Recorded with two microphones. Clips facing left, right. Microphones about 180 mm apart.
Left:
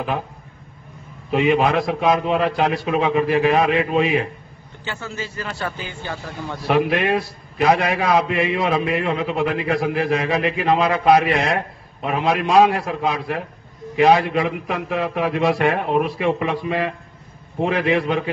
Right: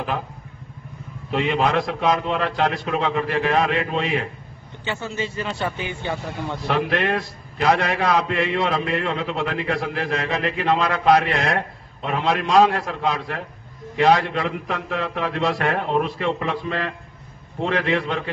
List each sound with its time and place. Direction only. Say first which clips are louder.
1.3 s a man's voice: left 3 dB; 10° left (ahead or behind)
4.8 s a man's voice: right 3 dB; 20° right (ahead or behind)
6.7 s a man's voice: left 4 dB; 10° left (ahead or behind)